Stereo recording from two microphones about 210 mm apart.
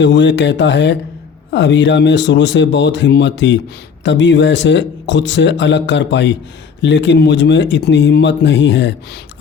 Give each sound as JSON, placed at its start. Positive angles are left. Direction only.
{"t": 0.0, "sound": "speech", "side_deg": 55}